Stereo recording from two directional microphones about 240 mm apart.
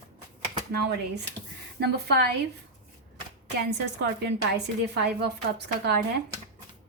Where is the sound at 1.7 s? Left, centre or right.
Right.